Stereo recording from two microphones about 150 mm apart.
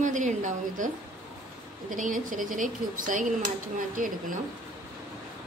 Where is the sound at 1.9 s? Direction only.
60° right (ahead or behind).